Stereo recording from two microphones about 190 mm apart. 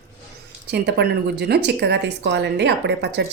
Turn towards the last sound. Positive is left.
turn(degrees=-65)  # may be behind; listen again after turning